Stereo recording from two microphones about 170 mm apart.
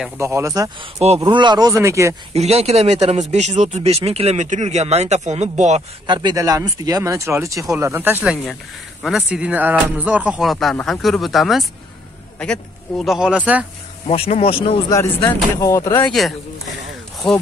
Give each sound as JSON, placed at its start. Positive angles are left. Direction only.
{"t": 0.2, "sound": "speech", "side_deg": -15}
{"t": 0.9, "sound": "speech", "side_deg": -40}
{"t": 2.3, "sound": "speech", "side_deg": -40}
{"t": 5.8, "sound": "speech", "side_deg": -25}
{"t": 14.0, "sound": "speech", "side_deg": 35}
{"t": 14.9, "sound": "speech", "side_deg": 20}
{"t": 16.1, "sound": "speech", "side_deg": 0}